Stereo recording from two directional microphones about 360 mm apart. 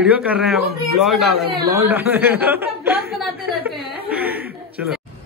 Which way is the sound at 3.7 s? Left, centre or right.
Centre.